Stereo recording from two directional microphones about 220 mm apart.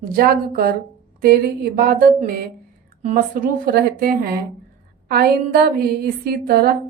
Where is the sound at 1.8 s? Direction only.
40° right (ahead or behind).